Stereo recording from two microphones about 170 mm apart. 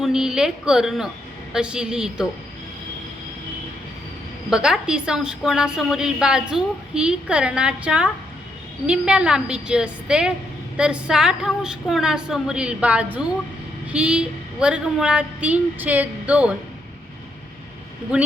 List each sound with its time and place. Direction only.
0.0 s a woman's voice: 5° right (ahead or behind)
4.4 s a woman's voice: 5° right (ahead or behind)